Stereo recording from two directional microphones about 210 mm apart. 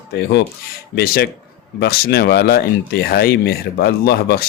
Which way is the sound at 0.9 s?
45° left (ahead or behind).